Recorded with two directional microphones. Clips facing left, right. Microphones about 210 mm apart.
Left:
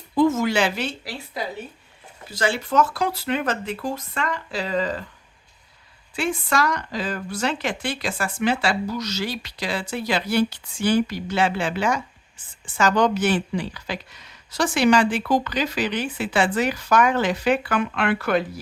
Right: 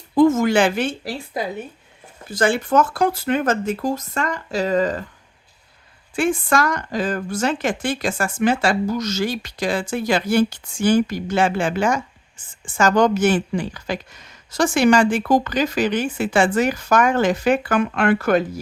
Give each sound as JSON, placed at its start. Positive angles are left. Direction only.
{"t": 0.1, "sound": "a woman's voice", "side_deg": -50}
{"t": 6.1, "sound": "speech", "side_deg": -50}